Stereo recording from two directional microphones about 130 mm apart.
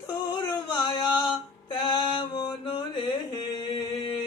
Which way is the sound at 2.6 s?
40° left (ahead or behind).